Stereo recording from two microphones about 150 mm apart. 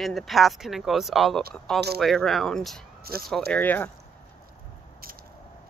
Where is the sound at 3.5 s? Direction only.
10° left (ahead or behind).